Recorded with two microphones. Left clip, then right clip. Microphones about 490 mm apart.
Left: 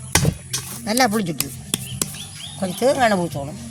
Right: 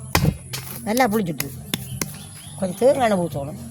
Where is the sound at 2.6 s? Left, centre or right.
Right.